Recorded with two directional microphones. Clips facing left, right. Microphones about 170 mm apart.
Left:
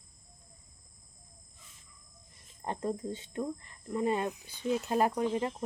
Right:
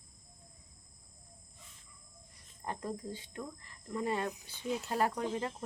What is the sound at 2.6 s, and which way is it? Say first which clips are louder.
Speech: left 5 dB; 25° left (ahead or behind).